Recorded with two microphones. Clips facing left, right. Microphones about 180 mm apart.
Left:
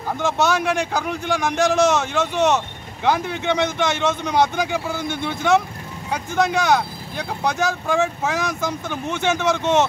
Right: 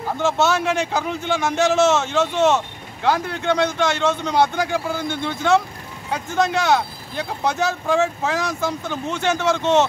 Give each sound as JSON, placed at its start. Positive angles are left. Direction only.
{"t": 0.4, "sound": "speech", "side_deg": 15}
{"t": 1.0, "sound": "a man's voice", "side_deg": 0}
{"t": 1.6, "sound": "speech", "side_deg": 15}
{"t": 7.9, "sound": "a man's voice", "side_deg": 5}
{"t": 8.5, "sound": "speech", "side_deg": 15}